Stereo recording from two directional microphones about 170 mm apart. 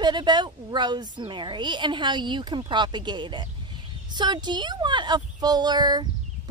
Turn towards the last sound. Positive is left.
turn(degrees=-25)  # may be behind; listen again after turning